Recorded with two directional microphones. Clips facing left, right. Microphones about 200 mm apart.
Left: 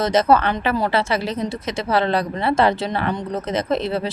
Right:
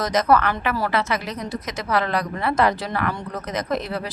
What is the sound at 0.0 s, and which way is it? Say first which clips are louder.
Speech: left 3 dB; 25° left (ahead or behind).